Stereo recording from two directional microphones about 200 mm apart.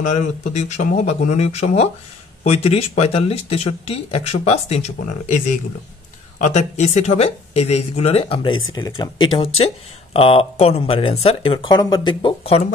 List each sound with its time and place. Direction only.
0.0 s speech: 35° left (ahead or behind)